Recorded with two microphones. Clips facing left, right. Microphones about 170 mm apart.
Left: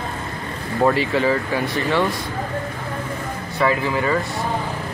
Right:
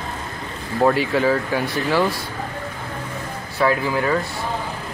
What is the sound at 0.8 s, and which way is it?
Speech, centre (ahead or behind).